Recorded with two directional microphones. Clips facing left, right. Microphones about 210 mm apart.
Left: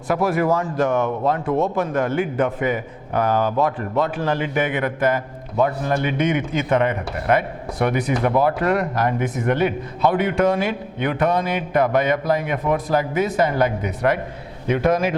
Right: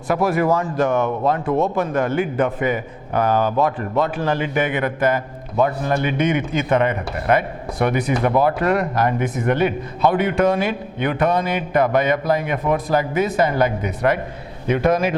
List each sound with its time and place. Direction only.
0.1 s speech: 10° right (ahead or behind)